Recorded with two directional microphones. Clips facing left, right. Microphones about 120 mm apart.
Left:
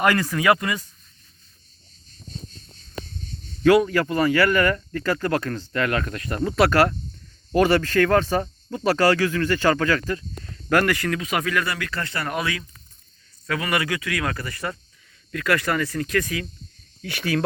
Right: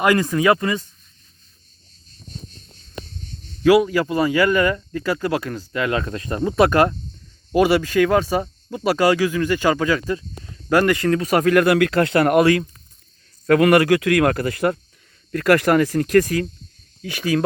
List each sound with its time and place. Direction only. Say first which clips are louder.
0.0 s speech: right 3 dB; 20° right (ahead or behind)
3.6 s speech: right 2 dB; 10° right (ahead or behind)
11.2 s speech: right 9 dB; 40° right (ahead or behind); by 12.5 s 60° right (ahead or behind)
13.5 s speech: right 11 dB; 55° right (ahead or behind)
15.3 s speech: right 7 dB; 45° right (ahead or behind)
17.0 s speech: right 4 dB; 15° right (ahead or behind)